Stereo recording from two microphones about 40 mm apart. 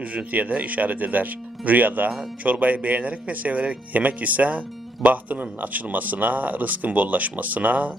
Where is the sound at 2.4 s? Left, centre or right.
Right.